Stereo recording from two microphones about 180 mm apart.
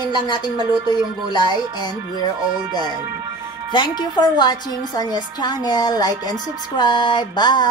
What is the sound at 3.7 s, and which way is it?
A woman's voice, 25° left (ahead or behind).